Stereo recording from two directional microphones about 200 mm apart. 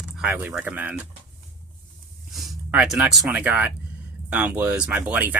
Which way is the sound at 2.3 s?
Centre (ahead or behind).